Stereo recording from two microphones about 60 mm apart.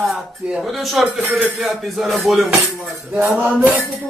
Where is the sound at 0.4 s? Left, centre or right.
Centre.